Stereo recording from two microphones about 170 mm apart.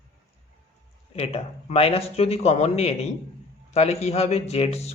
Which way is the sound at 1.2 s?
35° left (ahead or behind).